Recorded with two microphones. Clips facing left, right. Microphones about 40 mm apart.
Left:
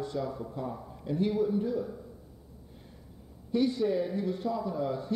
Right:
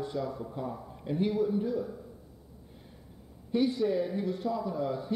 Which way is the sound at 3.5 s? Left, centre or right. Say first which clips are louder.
Even; centre.